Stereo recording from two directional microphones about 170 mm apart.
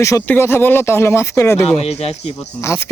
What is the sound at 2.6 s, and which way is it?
Speech, 15° left (ahead or behind).